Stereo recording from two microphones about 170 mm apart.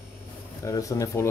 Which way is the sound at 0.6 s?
20° left (ahead or behind).